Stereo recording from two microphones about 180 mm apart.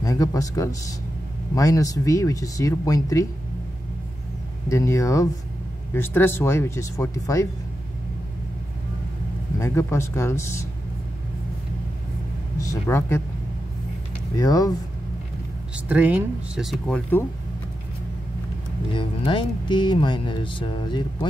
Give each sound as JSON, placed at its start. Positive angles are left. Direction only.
{"t": 0.0, "sound": "speech", "side_deg": 20}
{"t": 4.6, "sound": "speech", "side_deg": 15}
{"t": 9.6, "sound": "speech", "side_deg": 15}
{"t": 12.5, "sound": "speech", "side_deg": 15}
{"t": 14.3, "sound": "speech", "side_deg": 20}
{"t": 15.7, "sound": "speech", "side_deg": -10}
{"t": 18.9, "sound": "speech", "side_deg": 25}